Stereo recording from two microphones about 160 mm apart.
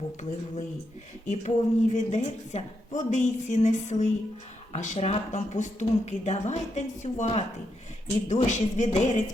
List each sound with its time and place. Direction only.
1.3 s speech: 45° left (ahead or behind)